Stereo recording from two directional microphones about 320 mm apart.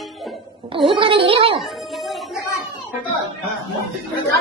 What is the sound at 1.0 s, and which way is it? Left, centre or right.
Speech, centre.